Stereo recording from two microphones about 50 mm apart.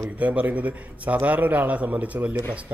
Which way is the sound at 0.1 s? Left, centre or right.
Right.